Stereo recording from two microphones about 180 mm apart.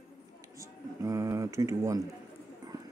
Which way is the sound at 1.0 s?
15° right (ahead or behind).